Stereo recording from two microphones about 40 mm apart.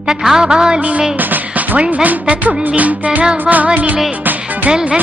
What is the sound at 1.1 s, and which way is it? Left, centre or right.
Music, right.